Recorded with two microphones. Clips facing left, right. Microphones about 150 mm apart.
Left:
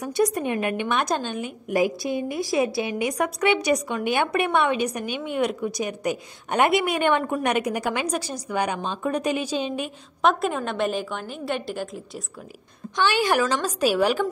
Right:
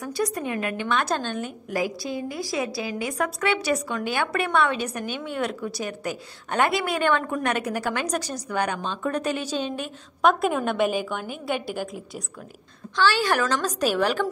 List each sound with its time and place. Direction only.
0.0 s a woman's voice: 20° left (ahead or behind)
1.7 s a woman's voice: 20° left (ahead or behind)
10.2 s a woman's voice: centre (ahead or behind)
12.9 s a woman's voice: 15° left (ahead or behind)